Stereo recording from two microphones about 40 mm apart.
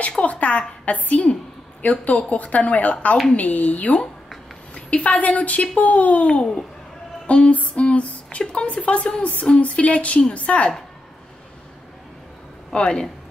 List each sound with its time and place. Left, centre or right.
0.2 s a woman's voice: left
7.2 s female singing: left
7.5 s a woman's voice: left
12.7 s female singing: left